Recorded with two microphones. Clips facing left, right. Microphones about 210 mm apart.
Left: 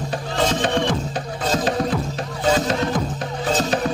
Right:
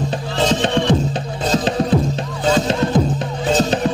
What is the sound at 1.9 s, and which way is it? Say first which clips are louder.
Music: right 7 dB; 30° right (ahead or behind).